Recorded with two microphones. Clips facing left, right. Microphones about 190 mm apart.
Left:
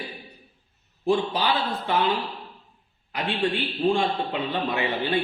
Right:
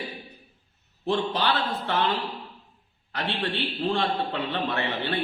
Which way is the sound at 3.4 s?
15° left (ahead or behind).